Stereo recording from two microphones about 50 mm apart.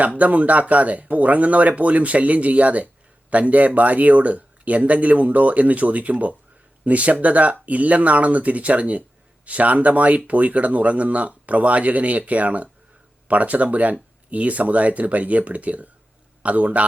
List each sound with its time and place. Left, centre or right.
0.0 s speech: right